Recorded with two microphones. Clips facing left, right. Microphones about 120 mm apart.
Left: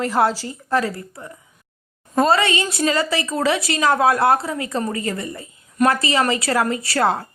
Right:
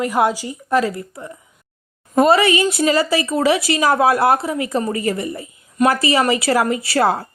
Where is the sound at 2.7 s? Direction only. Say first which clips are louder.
Right 4 dB; 25° right (ahead or behind).